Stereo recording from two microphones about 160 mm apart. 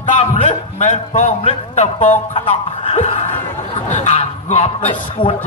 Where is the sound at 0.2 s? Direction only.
40° left (ahead or behind).